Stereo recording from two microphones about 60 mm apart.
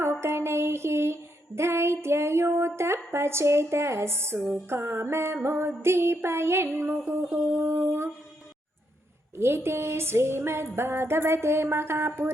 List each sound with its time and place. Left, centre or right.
0.0 s music: right
6.9 s a sound: right
7.3 s music: right
9.4 s music: right